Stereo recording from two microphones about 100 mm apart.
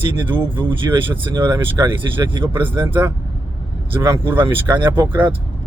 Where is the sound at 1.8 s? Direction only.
35° right (ahead or behind).